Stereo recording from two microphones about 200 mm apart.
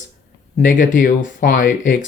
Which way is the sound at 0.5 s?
40° left (ahead or behind).